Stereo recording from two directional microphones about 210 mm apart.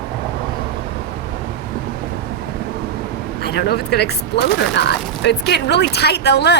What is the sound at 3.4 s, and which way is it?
Speech, 50° left (ahead or behind).